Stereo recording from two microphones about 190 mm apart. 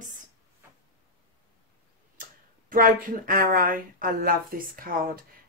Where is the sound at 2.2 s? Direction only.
45° right (ahead or behind).